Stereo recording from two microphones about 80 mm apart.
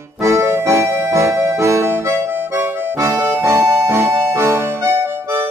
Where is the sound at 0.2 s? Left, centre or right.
Right.